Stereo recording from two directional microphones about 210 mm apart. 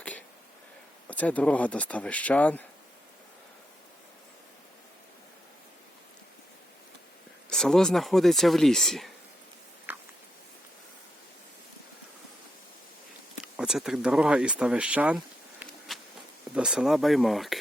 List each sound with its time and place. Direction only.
1.0 s speech: 5° left (ahead or behind)
7.5 s speech: centre (ahead or behind)
9.9 s a sound: 10° right (ahead or behind)
13.4 s speech: 5° right (ahead or behind)